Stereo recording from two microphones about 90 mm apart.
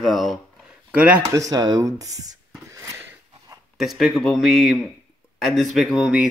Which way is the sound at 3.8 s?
Centre (ahead or behind).